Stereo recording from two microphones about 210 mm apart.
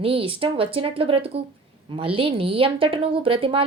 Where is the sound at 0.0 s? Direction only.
25° right (ahead or behind).